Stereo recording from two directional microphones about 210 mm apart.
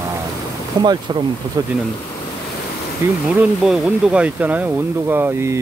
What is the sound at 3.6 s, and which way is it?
Speech, 5° right (ahead or behind).